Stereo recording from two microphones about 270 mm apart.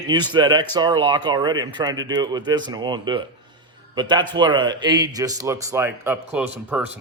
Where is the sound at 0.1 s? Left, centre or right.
Centre.